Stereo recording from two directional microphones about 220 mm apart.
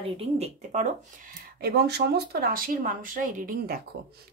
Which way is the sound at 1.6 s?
45° right (ahead or behind).